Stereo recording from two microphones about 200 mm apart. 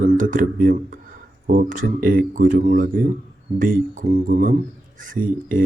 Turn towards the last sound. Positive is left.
turn(degrees=-45)  # may be behind; listen again after turning